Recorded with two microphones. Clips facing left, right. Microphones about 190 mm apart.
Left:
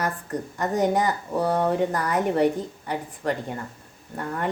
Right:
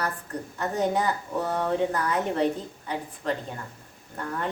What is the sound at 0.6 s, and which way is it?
A woman's voice, 15° left (ahead or behind).